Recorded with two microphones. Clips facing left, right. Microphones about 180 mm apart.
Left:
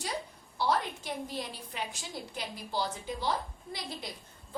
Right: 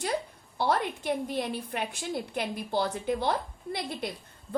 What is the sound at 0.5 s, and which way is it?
A woman's voice, 55° right (ahead or behind).